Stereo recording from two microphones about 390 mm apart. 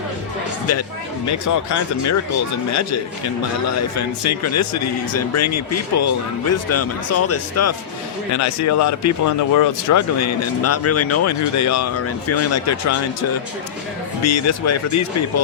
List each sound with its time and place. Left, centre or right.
1.3 s speech: left
3.7 s speech: left
14.2 s speech: left